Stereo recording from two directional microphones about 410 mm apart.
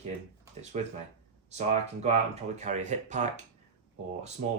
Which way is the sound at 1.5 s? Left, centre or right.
Centre.